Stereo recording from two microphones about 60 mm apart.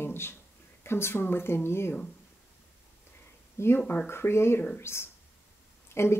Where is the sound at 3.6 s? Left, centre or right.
Left.